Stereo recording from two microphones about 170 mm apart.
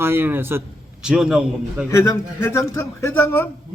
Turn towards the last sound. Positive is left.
turn(degrees=10)  # may be behind; listen again after turning